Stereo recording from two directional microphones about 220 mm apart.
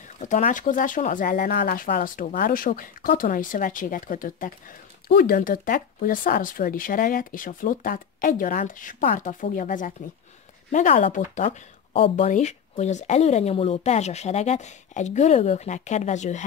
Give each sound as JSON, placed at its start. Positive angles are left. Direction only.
{"t": 0.2, "sound": "speech", "side_deg": 35}